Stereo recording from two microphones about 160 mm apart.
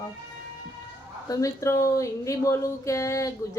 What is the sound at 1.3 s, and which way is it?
Speech, 20° left (ahead or behind).